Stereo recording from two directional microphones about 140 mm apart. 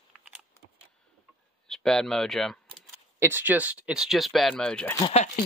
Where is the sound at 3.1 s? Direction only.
15° right (ahead or behind); by 4.9 s 5° left (ahead or behind).